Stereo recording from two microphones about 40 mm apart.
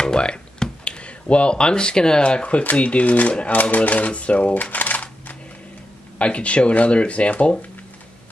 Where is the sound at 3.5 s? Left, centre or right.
Left.